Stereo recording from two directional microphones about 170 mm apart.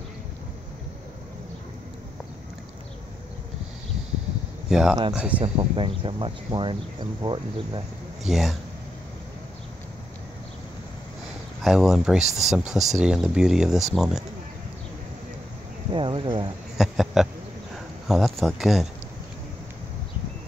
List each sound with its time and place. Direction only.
4.6 s speech: centre (ahead or behind)
5.4 s speech: 30° right (ahead or behind)
8.3 s speech: centre (ahead or behind)
11.6 s speech: centre (ahead or behind)
15.9 s speech: 30° right (ahead or behind)
16.7 s speech: centre (ahead or behind)